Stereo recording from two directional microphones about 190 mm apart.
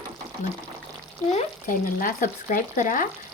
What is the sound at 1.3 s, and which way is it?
Speech, 40° left (ahead or behind).